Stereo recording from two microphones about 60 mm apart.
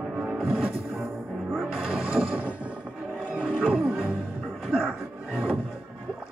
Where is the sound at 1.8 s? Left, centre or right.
Centre.